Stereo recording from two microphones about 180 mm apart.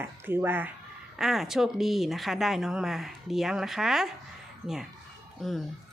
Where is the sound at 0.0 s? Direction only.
10° right (ahead or behind).